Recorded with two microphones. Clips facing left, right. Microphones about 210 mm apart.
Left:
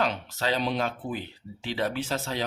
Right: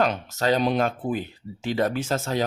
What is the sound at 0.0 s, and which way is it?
Speech, 45° right (ahead or behind).